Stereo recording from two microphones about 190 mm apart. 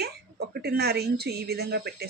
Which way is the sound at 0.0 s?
55° right (ahead or behind).